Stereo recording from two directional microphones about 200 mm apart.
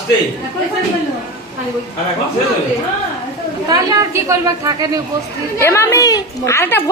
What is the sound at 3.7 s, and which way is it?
Speech, 15° right (ahead or behind).